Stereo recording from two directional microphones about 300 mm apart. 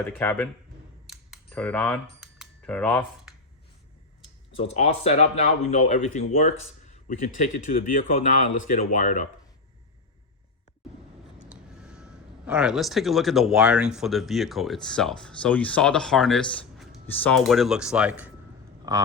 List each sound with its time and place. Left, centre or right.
0.0 s speech: centre
1.0 s typing: centre
4.5 s speech: centre
11.5 s speech: centre